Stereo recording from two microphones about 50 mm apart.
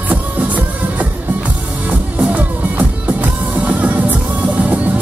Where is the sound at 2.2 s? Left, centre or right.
Right.